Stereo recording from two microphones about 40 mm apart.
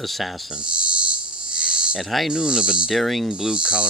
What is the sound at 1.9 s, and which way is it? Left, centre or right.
Speech, centre.